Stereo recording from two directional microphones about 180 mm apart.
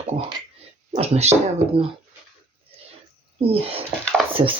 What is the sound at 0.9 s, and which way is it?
Speech, 35° right (ahead or behind).